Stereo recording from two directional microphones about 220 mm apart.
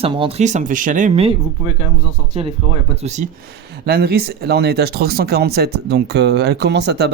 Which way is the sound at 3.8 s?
45° right (ahead or behind).